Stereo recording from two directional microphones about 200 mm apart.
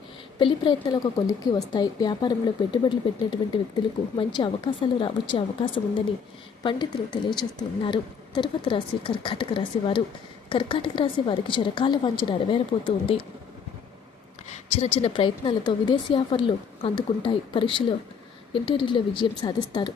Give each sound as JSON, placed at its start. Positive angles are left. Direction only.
{"t": 0.3, "sound": "a woman's voice", "side_deg": 25}
{"t": 14.5, "sound": "a woman's voice", "side_deg": 30}